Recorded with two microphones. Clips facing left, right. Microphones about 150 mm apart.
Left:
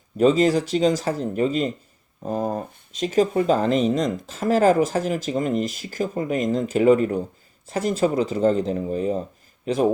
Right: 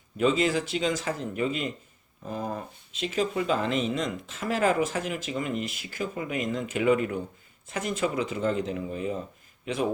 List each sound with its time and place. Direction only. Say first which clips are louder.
0.2 s speech: left 7 dB; 40° left (ahead or behind)